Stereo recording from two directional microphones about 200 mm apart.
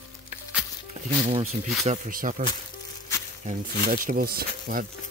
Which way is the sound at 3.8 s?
45° right (ahead or behind).